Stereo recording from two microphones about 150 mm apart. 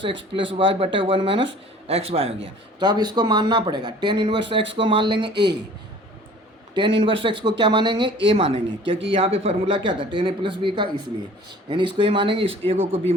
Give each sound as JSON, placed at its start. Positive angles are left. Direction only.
{"t": 0.0, "sound": "speech", "side_deg": -35}
{"t": 6.7, "sound": "speech", "side_deg": -35}